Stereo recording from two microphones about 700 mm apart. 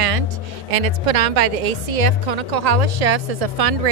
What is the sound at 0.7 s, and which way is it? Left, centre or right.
A woman's voice, right.